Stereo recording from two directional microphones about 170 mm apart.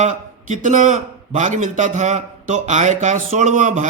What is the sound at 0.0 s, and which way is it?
A man's voice, 45° right (ahead or behind).